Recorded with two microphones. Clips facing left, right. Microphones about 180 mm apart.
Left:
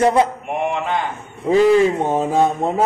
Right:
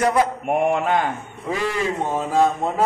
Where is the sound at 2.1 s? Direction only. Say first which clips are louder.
Left 2 dB; 20° left (ahead or behind).